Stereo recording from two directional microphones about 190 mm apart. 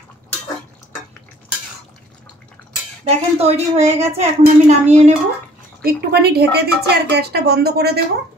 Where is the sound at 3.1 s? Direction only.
30° right (ahead or behind).